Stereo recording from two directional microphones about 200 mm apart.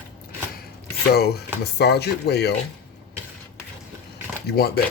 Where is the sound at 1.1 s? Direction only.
50° left (ahead or behind).